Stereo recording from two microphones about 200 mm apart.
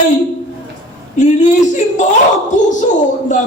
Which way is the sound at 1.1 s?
35° left (ahead or behind).